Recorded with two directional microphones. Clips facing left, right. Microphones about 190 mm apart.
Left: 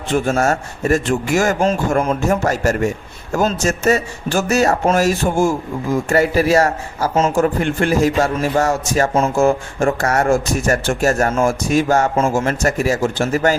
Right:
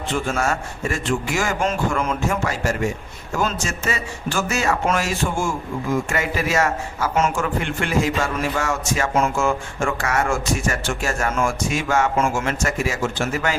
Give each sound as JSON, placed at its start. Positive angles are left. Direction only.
{"t": 0.1, "sound": "a man's voice", "side_deg": 40}